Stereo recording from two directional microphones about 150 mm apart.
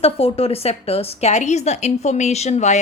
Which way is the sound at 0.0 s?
40° left (ahead or behind).